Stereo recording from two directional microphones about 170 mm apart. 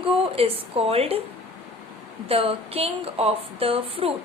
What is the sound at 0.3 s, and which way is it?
Speech, 35° right (ahead or behind).